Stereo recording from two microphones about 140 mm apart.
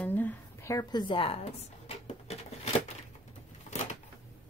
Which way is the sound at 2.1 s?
50° left (ahead or behind).